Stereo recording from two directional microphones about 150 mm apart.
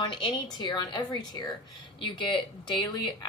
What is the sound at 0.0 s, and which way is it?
Speech, 30° left (ahead or behind).